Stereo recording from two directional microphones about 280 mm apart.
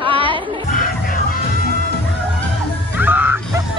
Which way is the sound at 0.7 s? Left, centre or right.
Left.